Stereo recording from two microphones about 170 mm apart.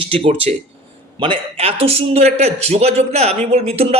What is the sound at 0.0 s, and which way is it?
A man's voice, 35° right (ahead or behind).